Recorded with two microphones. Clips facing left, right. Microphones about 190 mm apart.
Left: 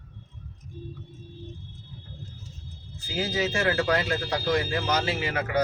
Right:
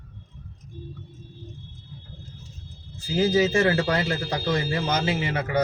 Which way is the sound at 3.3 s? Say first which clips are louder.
Right 5 dB; 35° right (ahead or behind).